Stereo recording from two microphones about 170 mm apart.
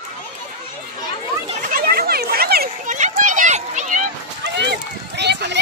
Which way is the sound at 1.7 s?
65° right (ahead or behind).